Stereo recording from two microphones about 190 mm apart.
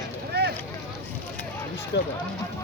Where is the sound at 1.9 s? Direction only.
65° left (ahead or behind).